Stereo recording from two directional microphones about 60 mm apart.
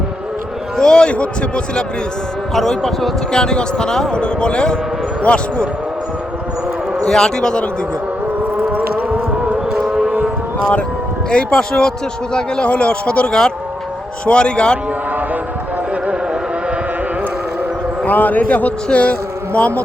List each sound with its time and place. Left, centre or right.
0.8 s a man's voice: centre
2.6 s a man's voice: centre
7.1 s a man's voice: centre
8.7 s a sound: right
9.9 s a sound: centre
11.3 s a man's voice: centre
16.0 s music: centre
18.0 s a man's voice: left